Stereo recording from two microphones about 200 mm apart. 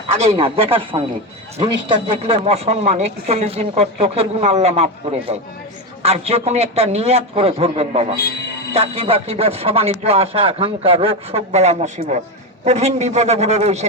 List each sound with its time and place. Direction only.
0.3 s speech: 25° right (ahead or behind)
6.0 s speech: 30° right (ahead or behind)